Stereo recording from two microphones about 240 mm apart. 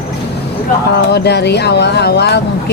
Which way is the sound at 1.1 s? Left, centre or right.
Left.